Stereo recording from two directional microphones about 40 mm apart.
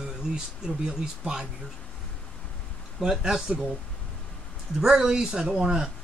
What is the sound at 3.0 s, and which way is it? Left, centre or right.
Speech, centre.